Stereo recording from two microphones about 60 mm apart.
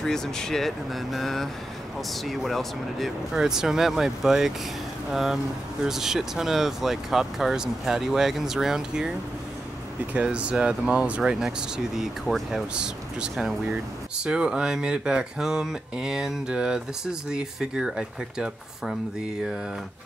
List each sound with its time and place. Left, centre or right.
0.0 s speech: centre
10.1 s speech: centre
12.7 s speech: centre